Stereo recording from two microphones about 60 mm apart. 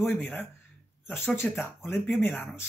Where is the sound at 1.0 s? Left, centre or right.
Left.